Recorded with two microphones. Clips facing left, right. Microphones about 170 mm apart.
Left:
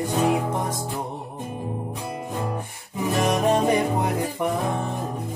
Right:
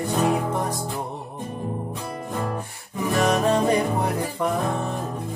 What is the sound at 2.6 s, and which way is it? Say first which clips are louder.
Music: even; 15° left (ahead or behind).